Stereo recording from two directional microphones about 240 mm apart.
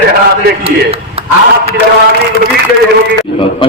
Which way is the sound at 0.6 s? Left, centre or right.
Right.